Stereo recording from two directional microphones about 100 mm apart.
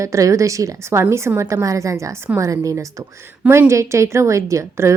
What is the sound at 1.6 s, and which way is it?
A woman's voice, 35° right (ahead or behind).